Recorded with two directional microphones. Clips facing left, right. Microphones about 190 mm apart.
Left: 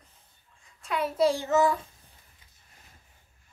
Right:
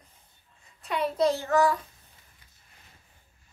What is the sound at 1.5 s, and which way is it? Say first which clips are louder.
Speech: even; 20° left (ahead or behind).